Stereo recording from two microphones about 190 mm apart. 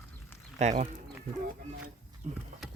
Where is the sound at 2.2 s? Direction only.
40° right (ahead or behind).